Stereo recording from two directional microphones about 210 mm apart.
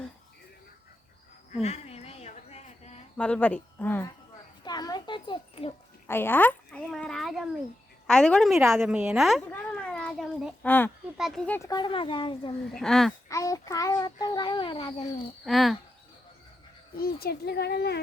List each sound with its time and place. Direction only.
1.6 s a sound: 30° left (ahead or behind)
3.2 s speech: 5° left (ahead or behind)
4.6 s a sound: 20° left (ahead or behind)
6.1 s speech: 10° left (ahead or behind)
8.8 s a child's voice: 5° right (ahead or behind); by 12.5 s 25° left (ahead or behind)
12.7 s speech: centre (ahead or behind)
13.2 s a child's voice: 15° left (ahead or behind)
15.4 s speech: centre (ahead or behind)
17.0 s speech: 45° left (ahead or behind)